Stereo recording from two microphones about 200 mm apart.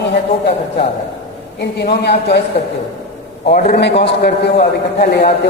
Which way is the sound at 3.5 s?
55° left (ahead or behind).